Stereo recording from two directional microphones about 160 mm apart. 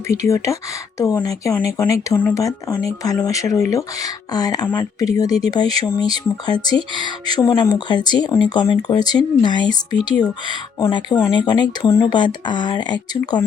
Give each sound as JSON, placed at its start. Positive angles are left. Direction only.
{"t": 0.2, "sound": "speech", "side_deg": 20}